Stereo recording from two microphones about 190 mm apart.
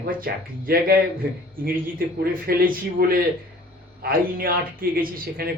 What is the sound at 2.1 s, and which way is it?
Speech, 50° right (ahead or behind).